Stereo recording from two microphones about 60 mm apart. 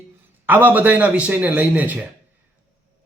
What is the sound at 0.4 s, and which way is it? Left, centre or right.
A man's voice, right.